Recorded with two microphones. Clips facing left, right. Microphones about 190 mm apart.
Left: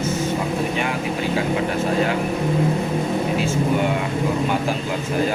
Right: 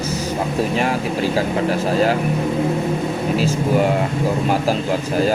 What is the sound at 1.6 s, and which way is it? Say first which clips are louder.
Speech: right 3 dB; 35° right (ahead or behind).